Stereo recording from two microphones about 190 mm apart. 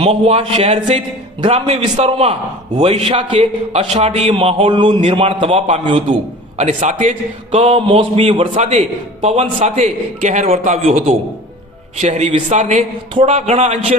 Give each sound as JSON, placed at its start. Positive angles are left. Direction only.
{"t": 0.0, "sound": "a man's voice", "side_deg": -35}